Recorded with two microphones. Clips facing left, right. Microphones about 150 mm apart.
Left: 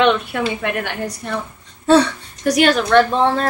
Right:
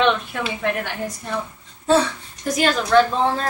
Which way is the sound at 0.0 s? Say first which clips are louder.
Left 4 dB; 70° left (ahead or behind).